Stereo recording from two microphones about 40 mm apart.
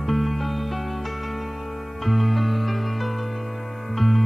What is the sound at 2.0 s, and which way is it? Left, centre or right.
Music, centre.